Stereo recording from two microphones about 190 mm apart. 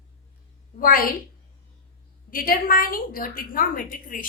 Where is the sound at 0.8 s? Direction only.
50° left (ahead or behind).